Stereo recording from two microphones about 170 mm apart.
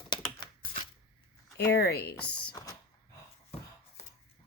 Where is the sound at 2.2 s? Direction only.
5° left (ahead or behind).